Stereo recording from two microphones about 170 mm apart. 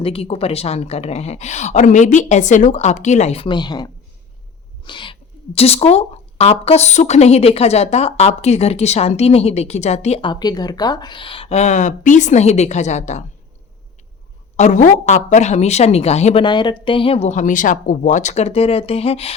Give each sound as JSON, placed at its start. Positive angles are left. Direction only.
{"t": 0.0, "sound": "speech", "side_deg": 35}
{"t": 4.9, "sound": "cat", "side_deg": 30}
{"t": 5.5, "sound": "speech", "side_deg": 35}
{"t": 10.2, "sound": "speech", "side_deg": 25}
{"t": 14.5, "sound": "speech", "side_deg": 45}